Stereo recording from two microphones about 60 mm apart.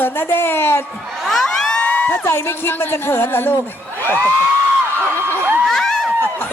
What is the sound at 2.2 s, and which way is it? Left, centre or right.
A woman's voice, left.